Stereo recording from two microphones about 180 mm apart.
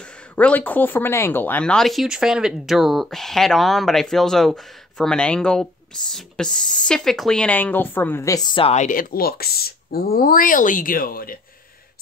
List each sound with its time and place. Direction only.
0.4 s speech: 10° left (ahead or behind); by 8.8 s 30° left (ahead or behind)
8.8 s speech: 50° left (ahead or behind)